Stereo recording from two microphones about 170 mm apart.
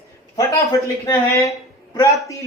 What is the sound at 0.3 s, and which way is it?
A man's voice, 15° left (ahead or behind).